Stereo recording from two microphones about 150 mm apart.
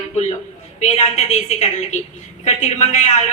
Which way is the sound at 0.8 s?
45° left (ahead or behind).